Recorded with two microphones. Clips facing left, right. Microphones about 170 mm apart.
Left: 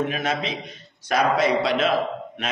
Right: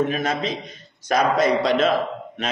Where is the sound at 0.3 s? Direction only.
45° right (ahead or behind).